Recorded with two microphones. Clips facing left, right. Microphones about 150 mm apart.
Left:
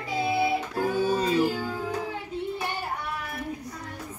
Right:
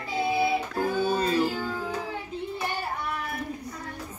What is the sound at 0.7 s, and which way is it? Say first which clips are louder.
Music: left 1 dB; 15° left (ahead or behind).